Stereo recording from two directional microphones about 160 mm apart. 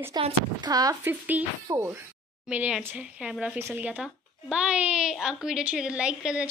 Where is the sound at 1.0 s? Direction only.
10° right (ahead or behind).